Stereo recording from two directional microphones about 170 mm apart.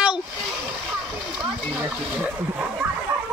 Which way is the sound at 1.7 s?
10° right (ahead or behind).